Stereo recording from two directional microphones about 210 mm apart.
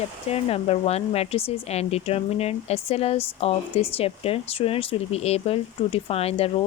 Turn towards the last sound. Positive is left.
turn(degrees=30)  # may be behind; listen again after turning